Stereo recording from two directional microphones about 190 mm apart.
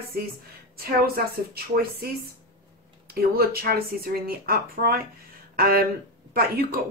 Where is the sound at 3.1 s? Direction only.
50° right (ahead or behind).